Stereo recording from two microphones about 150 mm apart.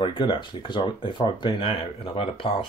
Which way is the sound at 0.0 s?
35° left (ahead or behind).